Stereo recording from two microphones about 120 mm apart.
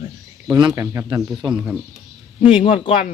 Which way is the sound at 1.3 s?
5° right (ahead or behind).